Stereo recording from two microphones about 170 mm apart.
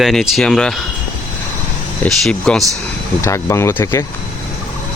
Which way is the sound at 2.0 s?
Centre (ahead or behind).